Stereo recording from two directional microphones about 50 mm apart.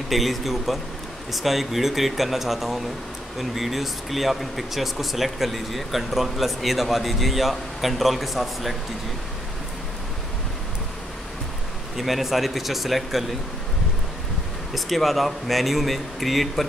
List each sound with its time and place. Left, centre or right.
0.1 s speech: centre
12.0 s speech: centre
14.7 s speech: centre